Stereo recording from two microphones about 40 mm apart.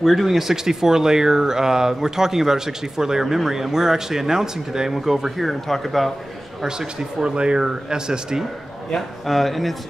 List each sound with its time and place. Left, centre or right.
0.0 s speech: centre
5.4 s speech: centre
6.6 s speech: centre
8.9 s speech: centre